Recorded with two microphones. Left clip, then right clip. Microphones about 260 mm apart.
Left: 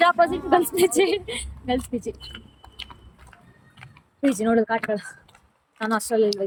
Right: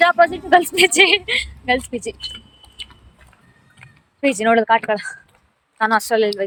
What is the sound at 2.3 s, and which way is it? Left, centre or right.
Typing, centre.